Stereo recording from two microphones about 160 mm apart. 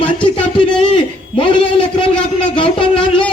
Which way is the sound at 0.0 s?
30° left (ahead or behind).